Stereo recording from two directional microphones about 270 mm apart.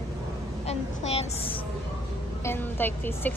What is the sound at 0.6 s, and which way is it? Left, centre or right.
Speech, left.